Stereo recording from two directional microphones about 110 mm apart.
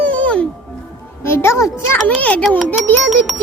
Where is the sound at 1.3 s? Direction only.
25° left (ahead or behind).